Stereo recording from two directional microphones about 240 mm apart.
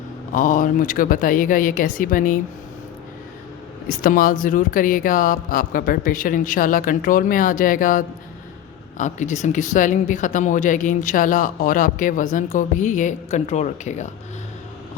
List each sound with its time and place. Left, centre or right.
0.3 s speech: left
3.8 s speech: left